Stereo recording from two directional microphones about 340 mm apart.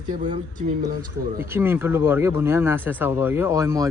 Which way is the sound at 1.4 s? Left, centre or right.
Centre.